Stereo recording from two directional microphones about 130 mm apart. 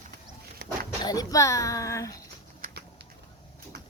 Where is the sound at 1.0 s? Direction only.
30° left (ahead or behind).